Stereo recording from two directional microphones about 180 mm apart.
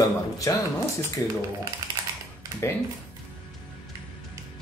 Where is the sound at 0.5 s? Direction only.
15° left (ahead or behind).